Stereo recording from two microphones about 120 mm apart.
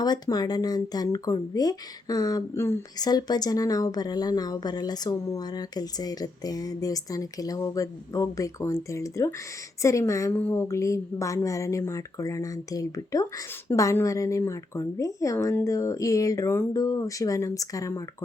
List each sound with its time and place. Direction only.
0.0 s speech: 35° left (ahead or behind)